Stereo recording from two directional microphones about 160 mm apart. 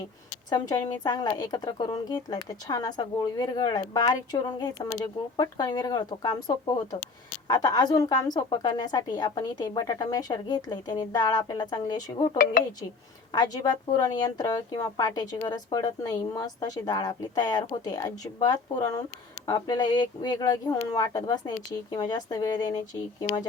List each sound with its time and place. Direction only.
0.5 s speech: 25° left (ahead or behind)
13.3 s speech: 25° left (ahead or behind)